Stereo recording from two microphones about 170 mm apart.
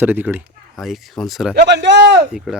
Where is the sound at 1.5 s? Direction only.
80° right.